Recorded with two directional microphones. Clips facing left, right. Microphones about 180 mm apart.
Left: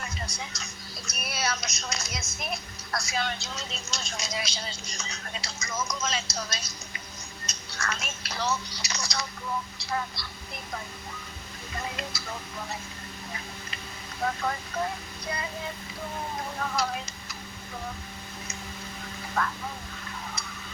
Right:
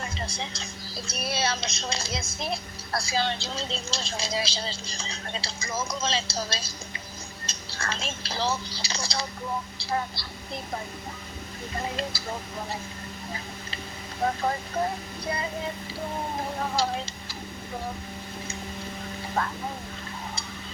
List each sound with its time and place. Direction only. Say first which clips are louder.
0.0 s a woman's voice: right 3 dB; 30° right (ahead or behind)
11.7 s a woman's voice: right 4 dB; 30° right (ahead or behind)
15.3 s child singing: right 3 dB; 30° right (ahead or behind)
16.6 s speech: right 2 dB; 30° right (ahead or behind)
19.4 s child singing: right 1 dB; 30° right (ahead or behind)